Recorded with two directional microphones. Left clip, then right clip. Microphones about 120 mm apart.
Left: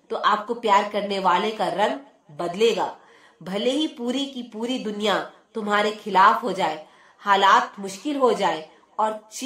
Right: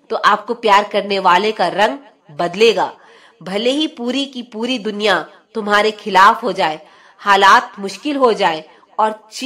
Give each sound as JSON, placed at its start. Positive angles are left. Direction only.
{"t": 0.1, "sound": "a woman's voice", "side_deg": -30}